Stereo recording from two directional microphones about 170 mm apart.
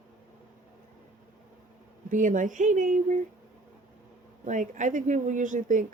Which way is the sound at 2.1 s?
50° right (ahead or behind).